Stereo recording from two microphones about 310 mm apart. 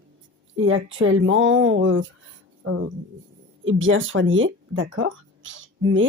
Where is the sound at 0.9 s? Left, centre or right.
Right.